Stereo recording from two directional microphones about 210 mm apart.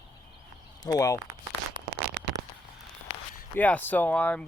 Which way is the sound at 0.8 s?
15° left (ahead or behind).